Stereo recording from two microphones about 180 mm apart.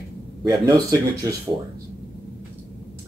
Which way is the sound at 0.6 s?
20° right (ahead or behind).